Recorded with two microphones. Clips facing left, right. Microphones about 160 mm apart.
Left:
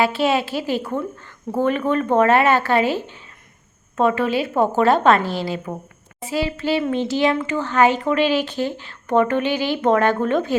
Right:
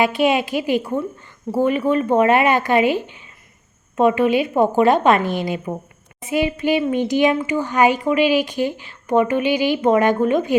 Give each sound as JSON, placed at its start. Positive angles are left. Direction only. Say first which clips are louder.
{"t": 0.0, "sound": "speech", "louder": "right 2 dB", "side_deg": -15}